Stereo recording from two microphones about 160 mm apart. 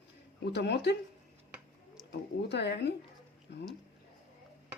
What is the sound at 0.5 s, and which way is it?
Speech, 90° left.